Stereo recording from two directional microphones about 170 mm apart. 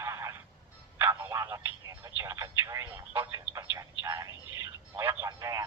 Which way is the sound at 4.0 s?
20° right (ahead or behind).